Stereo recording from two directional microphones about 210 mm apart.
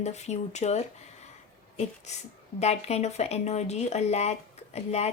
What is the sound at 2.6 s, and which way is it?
Speech, 30° left (ahead or behind).